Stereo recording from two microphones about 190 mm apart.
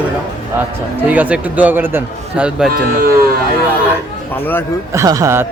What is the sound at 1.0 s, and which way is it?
Speech, 10° right (ahead or behind).